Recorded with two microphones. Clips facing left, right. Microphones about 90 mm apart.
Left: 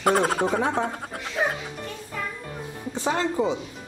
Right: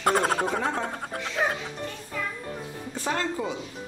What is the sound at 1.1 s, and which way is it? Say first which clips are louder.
Music: right 2 dB; centre (ahead or behind).